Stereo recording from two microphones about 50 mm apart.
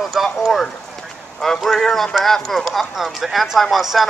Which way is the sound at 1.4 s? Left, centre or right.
Centre.